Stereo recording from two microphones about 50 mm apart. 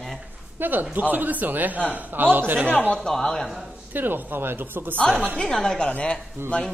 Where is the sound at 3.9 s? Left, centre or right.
Right.